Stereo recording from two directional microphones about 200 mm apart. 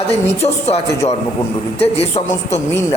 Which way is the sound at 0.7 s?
30° left (ahead or behind).